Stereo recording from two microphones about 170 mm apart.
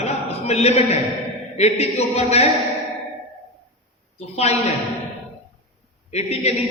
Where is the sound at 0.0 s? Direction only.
40° left (ahead or behind).